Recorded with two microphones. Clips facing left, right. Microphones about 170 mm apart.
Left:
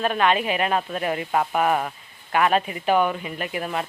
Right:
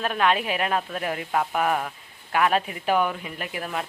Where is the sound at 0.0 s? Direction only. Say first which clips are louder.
Left 2 dB; centre (ahead or behind).